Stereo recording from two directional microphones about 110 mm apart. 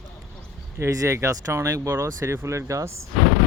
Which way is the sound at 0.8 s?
30° right (ahead or behind).